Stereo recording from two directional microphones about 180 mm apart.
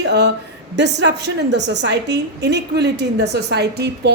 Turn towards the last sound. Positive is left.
turn(degrees=-65)  # may be behind; listen again after turning